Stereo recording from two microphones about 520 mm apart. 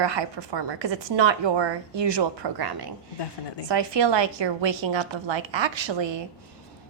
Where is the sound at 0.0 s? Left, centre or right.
Right.